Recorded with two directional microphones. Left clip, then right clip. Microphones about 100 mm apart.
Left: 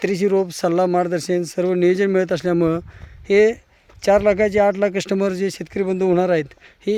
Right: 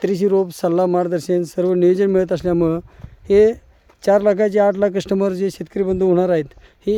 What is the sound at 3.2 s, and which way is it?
Speech, 40° right (ahead or behind).